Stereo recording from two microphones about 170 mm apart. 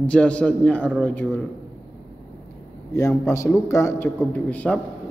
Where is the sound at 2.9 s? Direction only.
15° left (ahead or behind).